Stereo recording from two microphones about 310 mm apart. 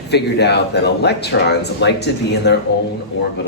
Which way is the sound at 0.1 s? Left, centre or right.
Left.